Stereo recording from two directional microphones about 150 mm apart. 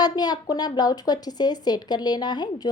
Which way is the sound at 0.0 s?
25° left (ahead or behind).